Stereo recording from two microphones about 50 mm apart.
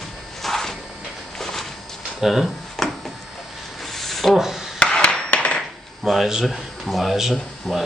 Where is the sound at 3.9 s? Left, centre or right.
Centre.